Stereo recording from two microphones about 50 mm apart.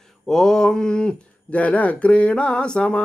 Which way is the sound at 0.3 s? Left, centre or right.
Centre.